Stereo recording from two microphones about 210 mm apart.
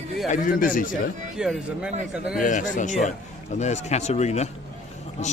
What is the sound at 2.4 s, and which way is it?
Speech, 35° left (ahead or behind).